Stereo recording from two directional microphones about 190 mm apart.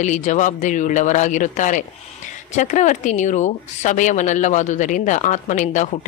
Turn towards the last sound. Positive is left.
turn(degrees=40)  # may be behind; listen again after turning